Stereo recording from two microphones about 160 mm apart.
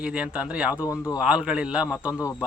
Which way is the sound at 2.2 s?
20° left (ahead or behind).